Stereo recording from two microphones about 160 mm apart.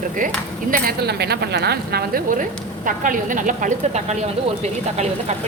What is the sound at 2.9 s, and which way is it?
A woman's voice, 55° right (ahead or behind).